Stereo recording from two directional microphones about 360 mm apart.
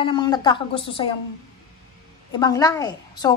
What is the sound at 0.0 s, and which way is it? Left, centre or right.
A woman's voice, centre.